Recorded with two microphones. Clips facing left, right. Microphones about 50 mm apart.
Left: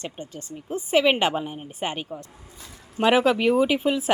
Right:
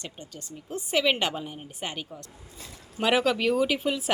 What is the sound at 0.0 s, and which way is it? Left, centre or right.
A woman's voice, left.